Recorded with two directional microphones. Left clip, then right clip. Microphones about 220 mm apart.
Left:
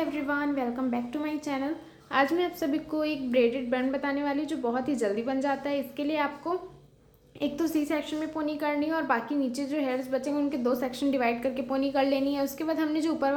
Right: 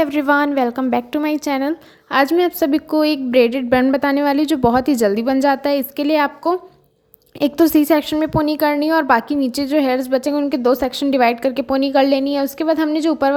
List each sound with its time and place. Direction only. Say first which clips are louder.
0.0 s a woman's voice: right 14 dB; 50° right (ahead or behind)